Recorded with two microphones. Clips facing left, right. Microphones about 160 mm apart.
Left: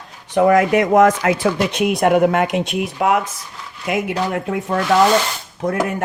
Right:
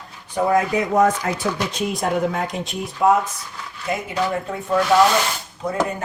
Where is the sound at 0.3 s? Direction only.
75° left (ahead or behind).